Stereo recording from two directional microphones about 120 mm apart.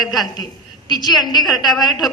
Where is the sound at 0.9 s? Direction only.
35° left (ahead or behind).